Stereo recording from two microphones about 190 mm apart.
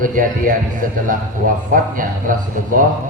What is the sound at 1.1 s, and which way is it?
A man's voice, 45° right (ahead or behind).